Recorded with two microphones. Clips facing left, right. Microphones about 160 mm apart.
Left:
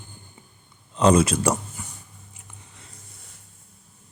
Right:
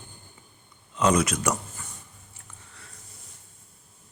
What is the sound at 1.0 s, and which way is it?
Speech, 30° left (ahead or behind).